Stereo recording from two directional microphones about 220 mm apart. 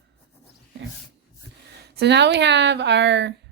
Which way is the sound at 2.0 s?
50° right (ahead or behind).